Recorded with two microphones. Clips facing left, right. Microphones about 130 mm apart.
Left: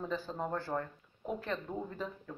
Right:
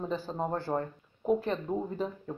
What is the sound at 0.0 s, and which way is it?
Speech, 25° right (ahead or behind).